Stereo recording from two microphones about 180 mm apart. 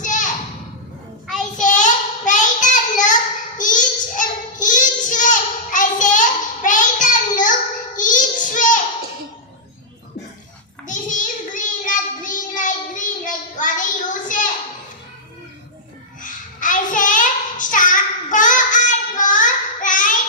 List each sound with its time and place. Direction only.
0.0 s a sound: 45° left (ahead or behind)
1.5 s child singing: 45° left (ahead or behind)
10.8 s child singing: 45° left (ahead or behind)
16.2 s child singing: 45° left (ahead or behind)